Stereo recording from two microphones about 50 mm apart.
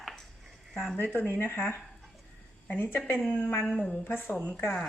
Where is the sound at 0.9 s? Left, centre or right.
Left.